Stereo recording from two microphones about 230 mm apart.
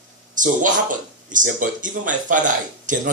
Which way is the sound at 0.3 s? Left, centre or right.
Right.